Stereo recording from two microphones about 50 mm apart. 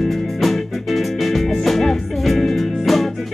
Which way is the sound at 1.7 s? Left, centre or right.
Centre.